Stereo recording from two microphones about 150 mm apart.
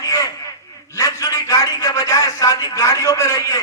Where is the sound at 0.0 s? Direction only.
25° left (ahead or behind).